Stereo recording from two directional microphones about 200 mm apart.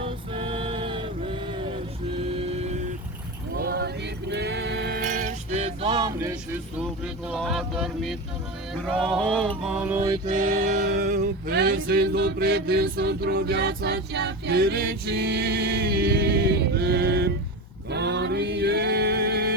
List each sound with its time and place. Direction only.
0.0 s music: 25° right (ahead or behind)
2.1 s vehicle: 30° right (ahead or behind)
3.5 s music: 50° right (ahead or behind)
5.2 s vehicle: 35° right (ahead or behind); by 8.1 s 5° right (ahead or behind)
8.9 s male singing: centre (ahead or behind)
10.2 s music: 45° right (ahead or behind)
11.5 s a sound: 55° right (ahead or behind)